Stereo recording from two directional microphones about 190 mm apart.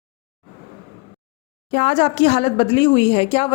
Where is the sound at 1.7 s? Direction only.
40° left (ahead or behind).